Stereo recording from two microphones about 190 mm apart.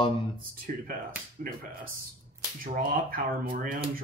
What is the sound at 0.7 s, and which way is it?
Speech, 45° right (ahead or behind).